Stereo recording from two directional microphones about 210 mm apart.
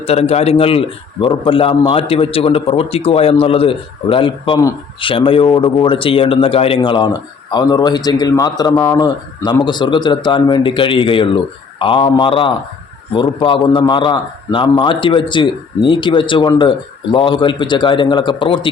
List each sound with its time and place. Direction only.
0.0 s a man's voice: 30° left (ahead or behind)